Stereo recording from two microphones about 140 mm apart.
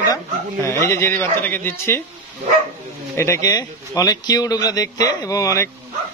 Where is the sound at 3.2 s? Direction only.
20° left (ahead or behind).